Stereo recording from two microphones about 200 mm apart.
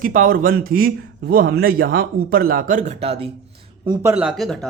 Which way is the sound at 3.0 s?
30° right (ahead or behind).